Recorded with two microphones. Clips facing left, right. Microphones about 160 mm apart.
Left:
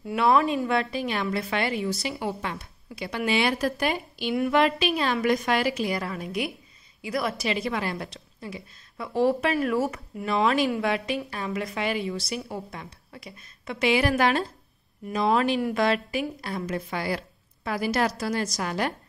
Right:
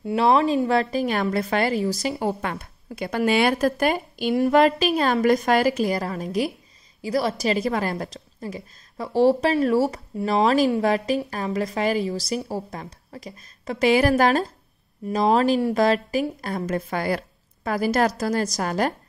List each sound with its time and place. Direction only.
0.0 s a woman's voice: 25° right (ahead or behind)